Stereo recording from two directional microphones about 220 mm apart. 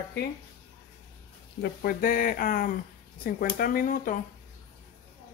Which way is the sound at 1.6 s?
40° left (ahead or behind).